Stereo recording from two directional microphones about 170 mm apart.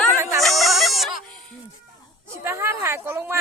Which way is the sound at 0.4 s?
Centre (ahead or behind).